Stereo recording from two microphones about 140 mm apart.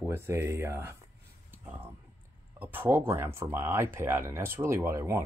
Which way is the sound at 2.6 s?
15° right (ahead or behind).